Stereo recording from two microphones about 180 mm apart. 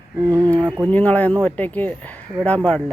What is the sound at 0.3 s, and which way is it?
Speech, 20° right (ahead or behind).